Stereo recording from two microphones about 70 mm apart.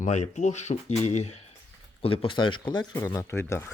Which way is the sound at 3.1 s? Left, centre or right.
Left.